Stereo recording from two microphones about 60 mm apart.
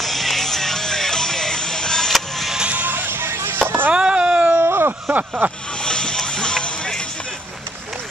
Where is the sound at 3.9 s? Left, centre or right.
Centre.